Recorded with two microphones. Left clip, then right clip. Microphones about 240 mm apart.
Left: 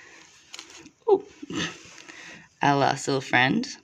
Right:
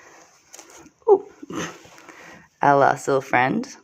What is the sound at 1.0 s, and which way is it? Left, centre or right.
Speech, left.